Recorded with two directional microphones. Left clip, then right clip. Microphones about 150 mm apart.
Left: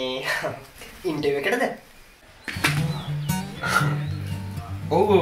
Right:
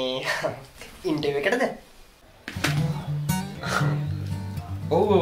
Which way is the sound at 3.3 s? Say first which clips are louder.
Even; centre (ahead or behind).